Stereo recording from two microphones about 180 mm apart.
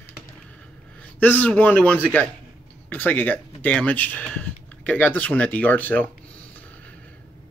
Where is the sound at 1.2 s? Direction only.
10° left (ahead or behind).